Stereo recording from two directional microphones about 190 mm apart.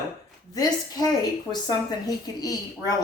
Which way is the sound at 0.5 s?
20° left (ahead or behind).